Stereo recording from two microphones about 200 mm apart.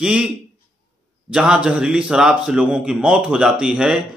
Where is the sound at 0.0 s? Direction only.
5° right (ahead or behind).